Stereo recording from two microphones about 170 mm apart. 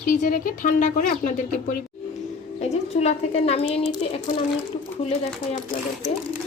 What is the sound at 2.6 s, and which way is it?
A woman's voice, 40° left (ahead or behind).